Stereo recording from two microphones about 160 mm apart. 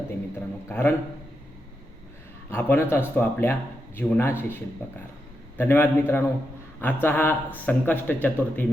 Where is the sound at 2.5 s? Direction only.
15° left (ahead or behind).